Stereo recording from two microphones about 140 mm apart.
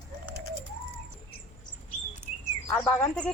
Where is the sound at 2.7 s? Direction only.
10° left (ahead or behind).